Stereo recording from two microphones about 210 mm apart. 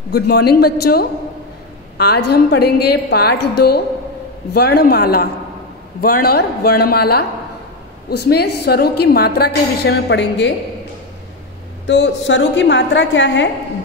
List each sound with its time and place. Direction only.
0.1 s a woman's voice: 50° left (ahead or behind)
11.9 s a woman's voice: 55° left (ahead or behind)